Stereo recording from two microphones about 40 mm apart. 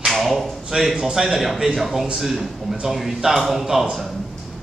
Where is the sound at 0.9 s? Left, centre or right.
Centre.